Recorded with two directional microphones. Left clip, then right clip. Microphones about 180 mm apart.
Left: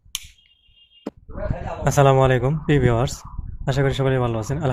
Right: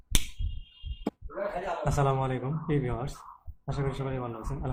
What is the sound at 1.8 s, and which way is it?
A man's voice, 50° left (ahead or behind).